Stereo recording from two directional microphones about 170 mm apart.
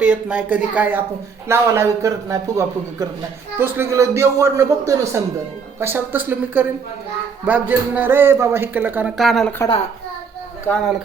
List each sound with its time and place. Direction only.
0.0 s speech: 5° right (ahead or behind)